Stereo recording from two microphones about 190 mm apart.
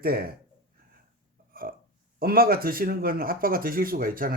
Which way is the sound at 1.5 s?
50° right (ahead or behind).